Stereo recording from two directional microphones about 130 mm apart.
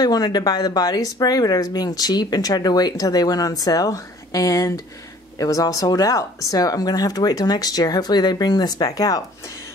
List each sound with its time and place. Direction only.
0.0 s speech: 30° left (ahead or behind)